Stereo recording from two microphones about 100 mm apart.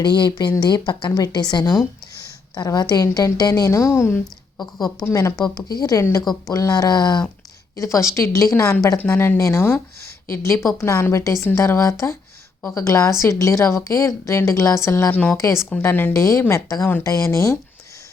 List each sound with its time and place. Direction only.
0.0 s speech: 45° left (ahead or behind); by 4.2 s 25° left (ahead or behind)
5.1 s speech: 35° left (ahead or behind)
7.8 s speech: 30° left (ahead or behind)
15.1 s a woman's voice: 15° left (ahead or behind); by 17.6 s 30° left (ahead or behind)